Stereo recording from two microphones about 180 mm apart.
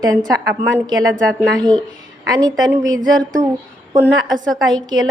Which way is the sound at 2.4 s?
20° right (ahead or behind).